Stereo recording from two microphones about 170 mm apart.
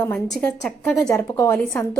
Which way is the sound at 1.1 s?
15° left (ahead or behind).